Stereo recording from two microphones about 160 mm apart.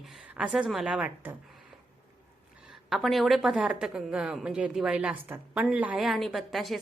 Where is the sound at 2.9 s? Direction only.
Centre (ahead or behind).